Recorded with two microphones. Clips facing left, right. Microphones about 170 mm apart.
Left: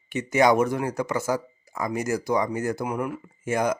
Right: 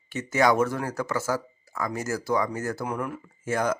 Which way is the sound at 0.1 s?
15° left (ahead or behind).